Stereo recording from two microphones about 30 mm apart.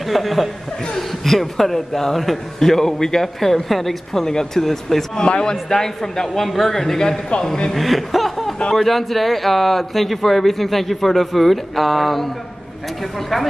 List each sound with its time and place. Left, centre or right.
0.0 s speech: centre
7.3 s a man's voice: left
7.7 s speech: centre